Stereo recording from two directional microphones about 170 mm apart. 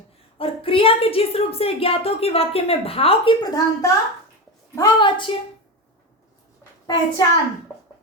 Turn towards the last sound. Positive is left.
turn(degrees=20)  # may be behind; listen again after turning